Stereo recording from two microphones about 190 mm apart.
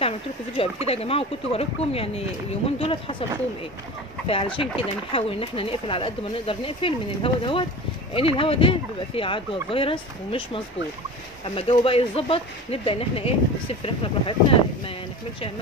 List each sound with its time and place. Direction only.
0.8 s speech: 30° left (ahead or behind)
4.3 s speech: 30° left (ahead or behind)